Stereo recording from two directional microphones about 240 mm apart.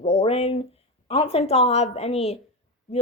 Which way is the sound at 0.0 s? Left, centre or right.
Left.